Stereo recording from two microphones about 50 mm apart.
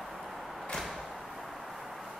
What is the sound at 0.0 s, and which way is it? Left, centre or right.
Door, centre.